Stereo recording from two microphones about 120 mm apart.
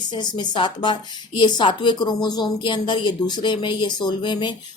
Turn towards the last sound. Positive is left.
turn(degrees=40)  # may be behind; listen again after turning